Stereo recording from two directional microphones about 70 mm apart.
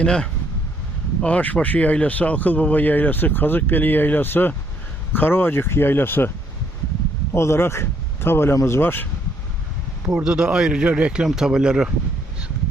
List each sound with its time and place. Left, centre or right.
0.0 s speech: centre; by 6.3 s left
7.3 s speech: left
10.1 s speech: centre